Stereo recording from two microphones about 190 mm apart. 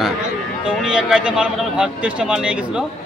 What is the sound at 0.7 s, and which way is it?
A man's voice, 5° right (ahead or behind).